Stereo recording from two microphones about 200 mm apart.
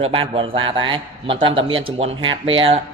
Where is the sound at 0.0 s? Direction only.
25° right (ahead or behind).